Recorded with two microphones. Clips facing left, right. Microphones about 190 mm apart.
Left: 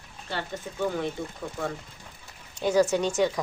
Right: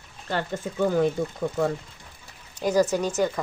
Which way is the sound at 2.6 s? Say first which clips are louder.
Right 1 dB; 10° right (ahead or behind).